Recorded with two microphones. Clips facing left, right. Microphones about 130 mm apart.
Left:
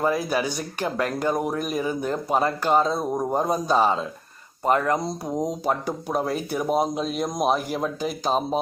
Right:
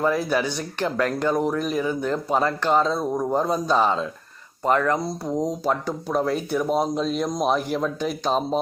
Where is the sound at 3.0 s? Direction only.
15° left (ahead or behind).